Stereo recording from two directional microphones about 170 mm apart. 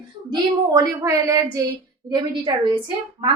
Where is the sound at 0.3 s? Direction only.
20° right (ahead or behind).